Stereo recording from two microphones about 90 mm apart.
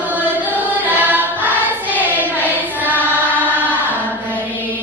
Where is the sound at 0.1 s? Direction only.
20° right (ahead or behind).